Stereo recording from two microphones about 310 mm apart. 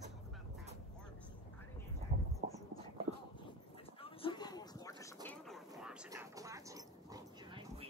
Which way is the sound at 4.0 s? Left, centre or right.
Centre.